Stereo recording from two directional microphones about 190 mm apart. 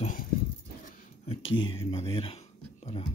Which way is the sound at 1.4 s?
90° left.